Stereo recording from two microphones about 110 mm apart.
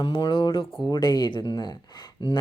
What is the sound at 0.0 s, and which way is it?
Speech, 55° left (ahead or behind).